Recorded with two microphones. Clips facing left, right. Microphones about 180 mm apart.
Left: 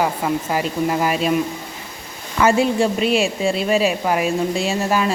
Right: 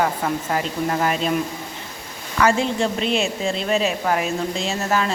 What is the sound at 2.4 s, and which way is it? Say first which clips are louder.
A woman's voice: left 3 dB; 15° left (ahead or behind).